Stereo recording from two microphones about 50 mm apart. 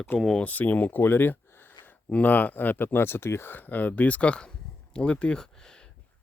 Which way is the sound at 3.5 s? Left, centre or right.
Left.